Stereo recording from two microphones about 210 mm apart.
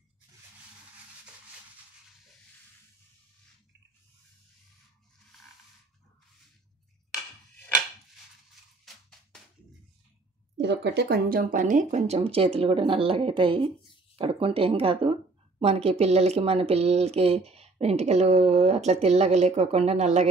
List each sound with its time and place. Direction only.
10.6 s speech: 55° right (ahead or behind); by 20.2 s 30° right (ahead or behind)